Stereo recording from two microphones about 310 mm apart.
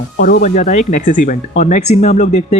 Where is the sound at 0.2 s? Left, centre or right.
Left.